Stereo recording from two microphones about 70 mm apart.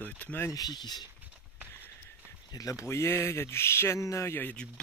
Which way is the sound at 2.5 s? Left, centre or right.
Left.